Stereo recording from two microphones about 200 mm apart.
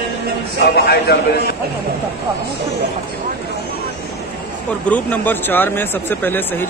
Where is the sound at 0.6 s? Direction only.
50° left (ahead or behind).